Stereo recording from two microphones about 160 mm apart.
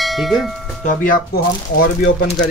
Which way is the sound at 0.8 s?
65° left (ahead or behind).